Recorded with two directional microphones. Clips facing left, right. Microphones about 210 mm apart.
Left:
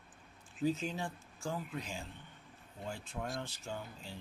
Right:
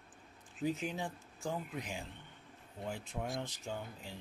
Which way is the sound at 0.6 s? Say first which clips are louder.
Left 2 dB; 15° right (ahead or behind).